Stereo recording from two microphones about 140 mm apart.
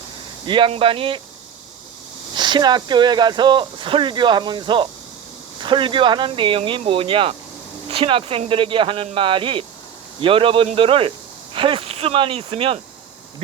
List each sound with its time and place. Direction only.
0.4 s speech: 35° right (ahead or behind)
2.3 s speech: 30° right (ahead or behind)